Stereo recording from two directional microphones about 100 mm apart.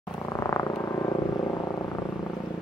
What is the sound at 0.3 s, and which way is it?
Purr, 30° left (ahead or behind).